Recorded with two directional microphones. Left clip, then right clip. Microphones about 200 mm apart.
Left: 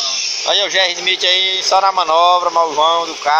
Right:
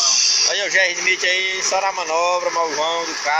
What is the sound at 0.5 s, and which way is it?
Speech, 35° left (ahead or behind).